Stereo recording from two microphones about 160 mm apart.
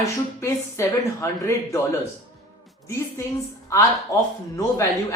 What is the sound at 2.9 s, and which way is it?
A woman's voice, 15° left (ahead or behind).